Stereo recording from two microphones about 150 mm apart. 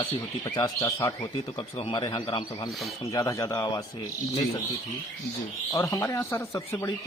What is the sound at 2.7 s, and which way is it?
Speech, centre (ahead or behind).